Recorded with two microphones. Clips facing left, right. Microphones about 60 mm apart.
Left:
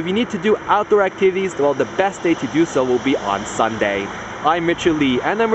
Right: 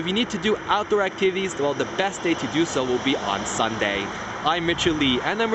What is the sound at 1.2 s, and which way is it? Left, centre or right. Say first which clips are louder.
Speech: left 6 dB; left.